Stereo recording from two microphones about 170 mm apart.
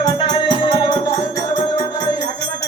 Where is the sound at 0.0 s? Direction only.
25° left (ahead or behind).